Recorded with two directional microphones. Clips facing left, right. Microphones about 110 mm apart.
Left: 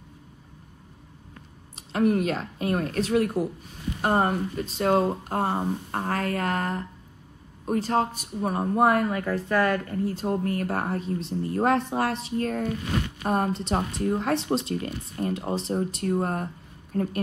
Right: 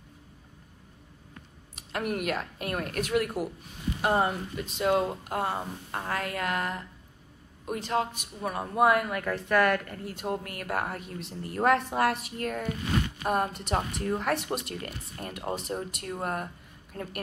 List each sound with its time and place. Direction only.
1.8 s speech: 30° left (ahead or behind)
4.0 s speech: 40° left (ahead or behind)